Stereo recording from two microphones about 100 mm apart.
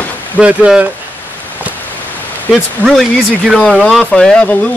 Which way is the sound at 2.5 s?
Centre (ahead or behind).